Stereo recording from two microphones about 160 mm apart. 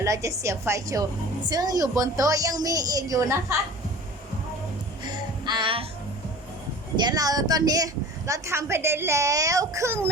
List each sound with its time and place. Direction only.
0.0 s a woman's voice: 20° right (ahead or behind)
5.0 s music: 30° right (ahead or behind)
6.9 s a woman's voice: 25° right (ahead or behind)